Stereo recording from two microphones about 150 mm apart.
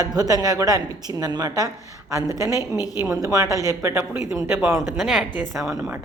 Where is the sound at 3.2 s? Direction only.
25° right (ahead or behind).